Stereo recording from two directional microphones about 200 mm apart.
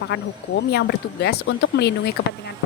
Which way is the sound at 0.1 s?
60° left (ahead or behind).